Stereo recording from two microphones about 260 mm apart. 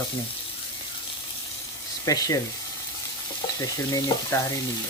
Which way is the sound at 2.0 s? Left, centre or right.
Centre.